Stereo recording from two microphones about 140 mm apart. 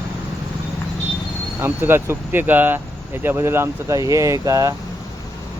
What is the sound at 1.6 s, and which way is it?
Speech, 15° right (ahead or behind).